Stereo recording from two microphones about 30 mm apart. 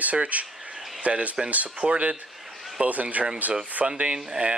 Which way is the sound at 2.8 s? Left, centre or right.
Right.